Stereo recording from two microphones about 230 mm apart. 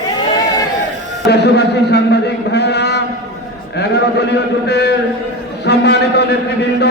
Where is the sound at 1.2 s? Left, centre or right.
Left.